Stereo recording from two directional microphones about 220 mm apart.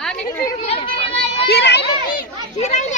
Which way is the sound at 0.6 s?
25° left (ahead or behind).